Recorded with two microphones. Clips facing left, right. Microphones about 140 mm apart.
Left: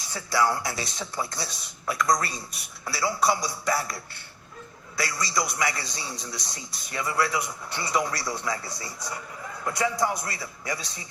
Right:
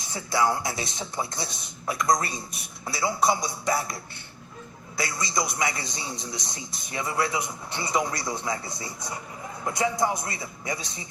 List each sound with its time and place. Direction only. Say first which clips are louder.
0.1 s a man's voice: even; 20° right (ahead or behind)